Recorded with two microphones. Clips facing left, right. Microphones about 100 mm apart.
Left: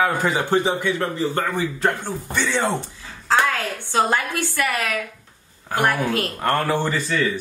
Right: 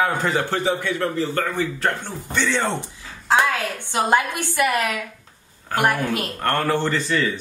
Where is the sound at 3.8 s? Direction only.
15° right (ahead or behind).